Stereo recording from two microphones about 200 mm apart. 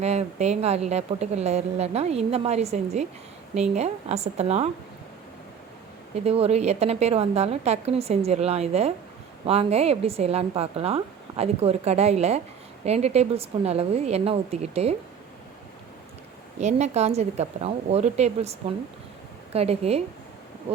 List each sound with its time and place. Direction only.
0.0 s speech: 35° right (ahead or behind)
6.1 s speech: 30° right (ahead or behind)
16.6 s speech: 35° right (ahead or behind)
19.5 s speech: 30° right (ahead or behind)